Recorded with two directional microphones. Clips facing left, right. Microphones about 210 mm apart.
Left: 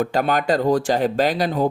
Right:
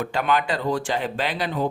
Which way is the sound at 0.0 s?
40° left (ahead or behind).